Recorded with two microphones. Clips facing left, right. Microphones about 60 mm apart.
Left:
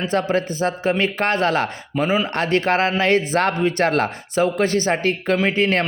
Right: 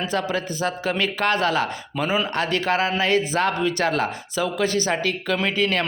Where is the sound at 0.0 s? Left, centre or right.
Left.